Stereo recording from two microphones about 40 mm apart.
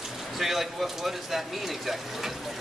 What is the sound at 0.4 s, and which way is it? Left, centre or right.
Speech, centre.